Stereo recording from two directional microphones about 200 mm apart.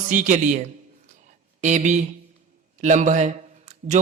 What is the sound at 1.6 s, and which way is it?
A man's voice, 35° right (ahead or behind).